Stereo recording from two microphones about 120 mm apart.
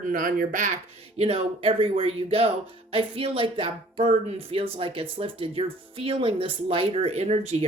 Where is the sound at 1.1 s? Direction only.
55° right (ahead or behind).